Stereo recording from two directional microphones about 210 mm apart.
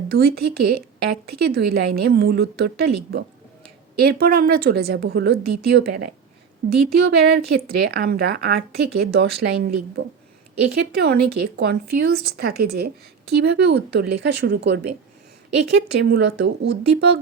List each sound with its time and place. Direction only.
0.1 s a woman's voice: 50° right (ahead or behind)